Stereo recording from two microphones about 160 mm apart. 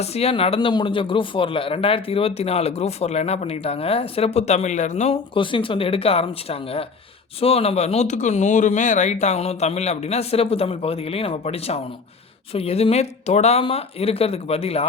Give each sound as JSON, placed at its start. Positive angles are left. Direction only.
{"t": 0.0, "sound": "speech", "side_deg": 40}
{"t": 5.3, "sound": "speech", "side_deg": 30}